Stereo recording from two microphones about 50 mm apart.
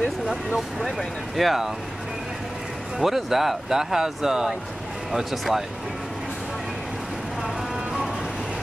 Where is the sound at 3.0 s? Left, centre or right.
Centre.